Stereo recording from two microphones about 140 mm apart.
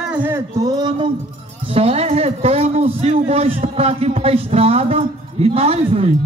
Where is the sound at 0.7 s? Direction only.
30° right (ahead or behind).